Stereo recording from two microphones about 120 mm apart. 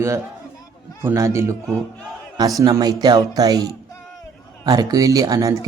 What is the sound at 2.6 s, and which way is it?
Speech, 30° right (ahead or behind).